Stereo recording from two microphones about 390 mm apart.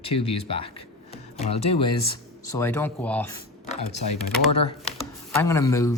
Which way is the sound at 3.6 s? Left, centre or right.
Centre.